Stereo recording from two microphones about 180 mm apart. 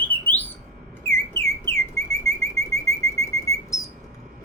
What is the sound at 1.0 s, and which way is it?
Bird, 15° left (ahead or behind).